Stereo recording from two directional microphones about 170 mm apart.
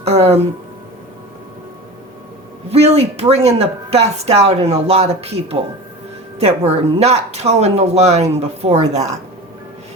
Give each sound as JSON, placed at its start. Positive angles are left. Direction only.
{"t": 0.0, "sound": "speech", "side_deg": -40}
{"t": 2.6, "sound": "a woman's voice", "side_deg": -40}